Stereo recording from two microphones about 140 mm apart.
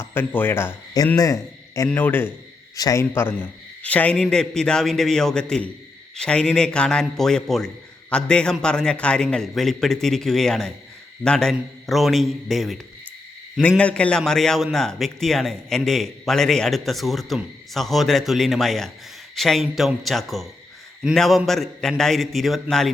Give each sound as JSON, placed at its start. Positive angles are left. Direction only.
{"t": 0.0, "sound": "a man's voice", "side_deg": 15}